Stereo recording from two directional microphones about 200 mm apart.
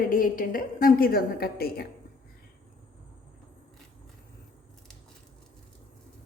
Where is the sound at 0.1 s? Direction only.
45° left (ahead or behind).